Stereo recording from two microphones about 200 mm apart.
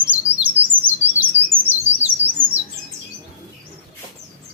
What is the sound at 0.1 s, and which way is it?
Bird, 10° right (ahead or behind).